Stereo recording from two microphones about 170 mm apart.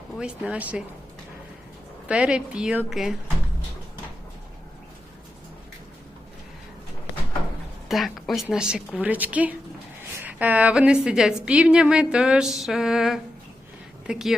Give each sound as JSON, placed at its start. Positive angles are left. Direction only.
{"t": 0.2, "sound": "speech", "side_deg": -5}
{"t": 2.0, "sound": "a woman's voice", "side_deg": -5}
{"t": 7.9, "sound": "a woman's voice", "side_deg": 0}